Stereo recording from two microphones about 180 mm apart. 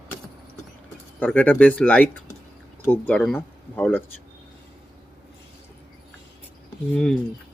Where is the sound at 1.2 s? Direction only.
10° left (ahead or behind).